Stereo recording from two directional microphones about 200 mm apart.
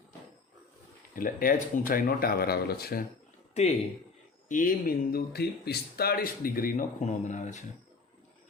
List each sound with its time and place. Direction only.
1.1 s speech: 45° left (ahead or behind)
4.4 s speech: 40° left (ahead or behind)